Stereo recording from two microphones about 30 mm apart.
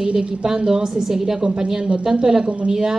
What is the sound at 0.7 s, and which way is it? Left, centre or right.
Speech, right.